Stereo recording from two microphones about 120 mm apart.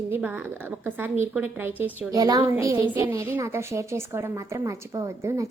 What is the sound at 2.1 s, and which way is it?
Speech, 30° right (ahead or behind).